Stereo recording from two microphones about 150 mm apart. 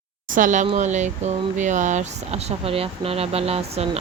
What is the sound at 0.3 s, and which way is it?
Speech, 60° right (ahead or behind).